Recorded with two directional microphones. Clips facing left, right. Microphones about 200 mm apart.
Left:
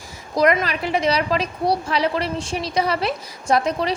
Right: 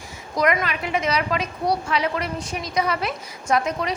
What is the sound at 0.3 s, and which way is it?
A woman's voice, 35° left (ahead or behind).